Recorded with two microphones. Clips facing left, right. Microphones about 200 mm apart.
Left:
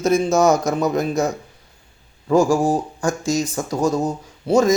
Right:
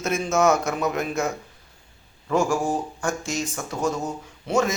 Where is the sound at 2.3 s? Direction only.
35° left (ahead or behind).